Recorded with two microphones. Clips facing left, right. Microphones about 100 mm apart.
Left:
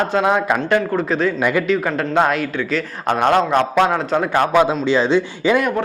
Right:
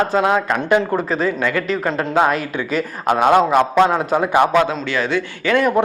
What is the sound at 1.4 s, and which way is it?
Speech, 15° left (ahead or behind).